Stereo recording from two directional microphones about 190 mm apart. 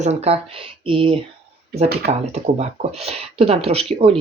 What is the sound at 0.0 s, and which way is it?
Speech, 35° right (ahead or behind).